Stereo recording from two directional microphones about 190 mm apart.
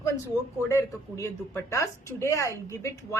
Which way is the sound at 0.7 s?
15° left (ahead or behind).